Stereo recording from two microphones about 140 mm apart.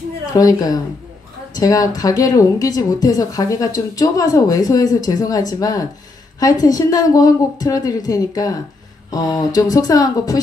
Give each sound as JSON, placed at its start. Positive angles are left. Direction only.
{"t": 0.3, "sound": "speech", "side_deg": 25}